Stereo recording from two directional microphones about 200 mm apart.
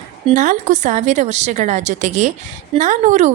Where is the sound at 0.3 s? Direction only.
40° right (ahead or behind).